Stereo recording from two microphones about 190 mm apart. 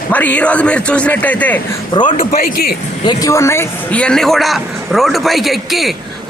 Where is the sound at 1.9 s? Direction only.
25° left (ahead or behind).